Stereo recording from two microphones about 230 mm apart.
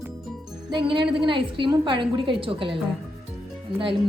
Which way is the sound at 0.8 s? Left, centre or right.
Right.